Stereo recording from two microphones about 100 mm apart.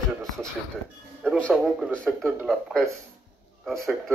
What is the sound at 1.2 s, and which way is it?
Speech, 10° left (ahead or behind).